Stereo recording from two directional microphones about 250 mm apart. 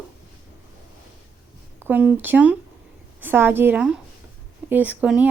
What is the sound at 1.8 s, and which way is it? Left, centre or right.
A woman's voice, centre.